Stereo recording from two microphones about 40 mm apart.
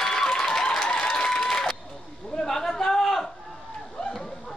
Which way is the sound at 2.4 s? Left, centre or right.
Centre.